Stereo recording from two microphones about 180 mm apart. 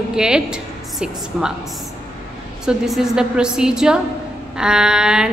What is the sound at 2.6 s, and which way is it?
A woman's voice, 5° right (ahead or behind).